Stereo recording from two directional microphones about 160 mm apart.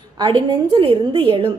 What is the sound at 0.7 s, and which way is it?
Speech, 35° right (ahead or behind).